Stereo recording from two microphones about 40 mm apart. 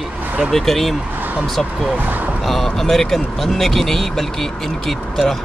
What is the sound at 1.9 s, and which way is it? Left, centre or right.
Speech, right.